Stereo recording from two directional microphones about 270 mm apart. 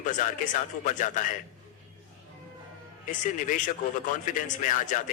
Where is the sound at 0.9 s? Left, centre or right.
Left.